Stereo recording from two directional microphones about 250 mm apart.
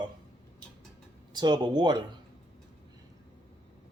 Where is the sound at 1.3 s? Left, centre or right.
Centre.